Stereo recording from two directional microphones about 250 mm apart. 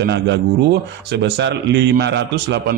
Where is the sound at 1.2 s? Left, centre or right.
Right.